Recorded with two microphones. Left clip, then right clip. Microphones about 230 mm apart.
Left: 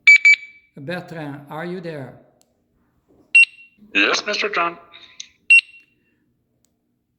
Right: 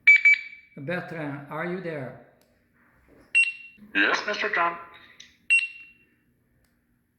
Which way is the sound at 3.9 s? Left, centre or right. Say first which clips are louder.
Left 5 dB; left.